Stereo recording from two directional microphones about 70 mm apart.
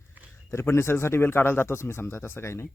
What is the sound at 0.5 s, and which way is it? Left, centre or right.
Speech, left.